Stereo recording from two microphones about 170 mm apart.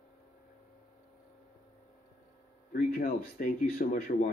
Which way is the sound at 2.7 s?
55° left (ahead or behind).